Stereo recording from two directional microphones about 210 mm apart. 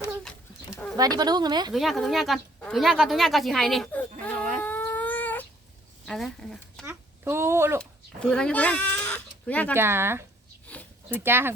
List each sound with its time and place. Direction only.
0.7 s a sound: 5° left (ahead or behind)
0.9 s a woman's voice: 20° right (ahead or behind)
1.7 s speech: centre (ahead or behind)
4.5 s dog: 10° left (ahead or behind)
6.1 s speech: centre (ahead or behind)
6.8 s a child's voice: 10° right (ahead or behind)
7.8 s speech: 5° left (ahead or behind)
9.7 s speech: 10° right (ahead or behind)
10.7 s a sound: 5° left (ahead or behind)
11.1 s speech: 10° right (ahead or behind)